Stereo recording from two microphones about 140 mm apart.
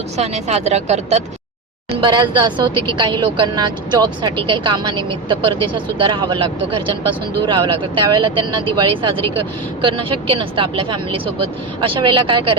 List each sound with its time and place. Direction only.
0.2 s speech: 55° right (ahead or behind)
1.9 s speech: 35° right (ahead or behind)